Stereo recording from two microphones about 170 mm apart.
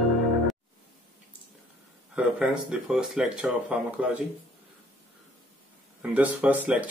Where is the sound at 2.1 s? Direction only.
5° right (ahead or behind).